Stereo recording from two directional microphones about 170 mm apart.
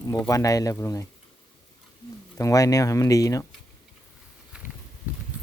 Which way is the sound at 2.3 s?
20° left (ahead or behind).